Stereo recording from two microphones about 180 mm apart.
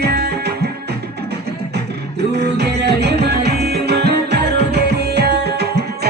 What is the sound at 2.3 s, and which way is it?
Music, 65° right (ahead or behind).